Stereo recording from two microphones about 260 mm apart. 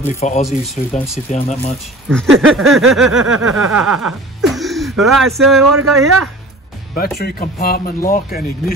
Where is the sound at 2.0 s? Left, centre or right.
Centre.